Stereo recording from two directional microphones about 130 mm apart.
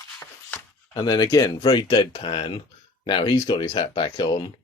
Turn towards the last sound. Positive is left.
turn(degrees=30)  # may be behind; listen again after turning